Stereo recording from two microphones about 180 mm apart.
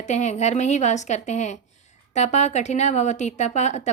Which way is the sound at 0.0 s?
40° left (ahead or behind).